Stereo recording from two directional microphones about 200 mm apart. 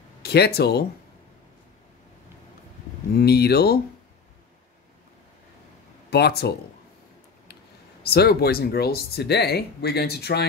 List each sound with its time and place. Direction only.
0.2 s speech: 55° left (ahead or behind)
3.2 s speech: 55° left (ahead or behind)
6.0 s speech: 55° left (ahead or behind)
8.0 s speech: 50° left (ahead or behind)